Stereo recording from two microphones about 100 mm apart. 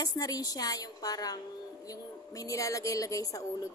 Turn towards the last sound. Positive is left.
turn(degrees=35)  # may be behind; listen again after turning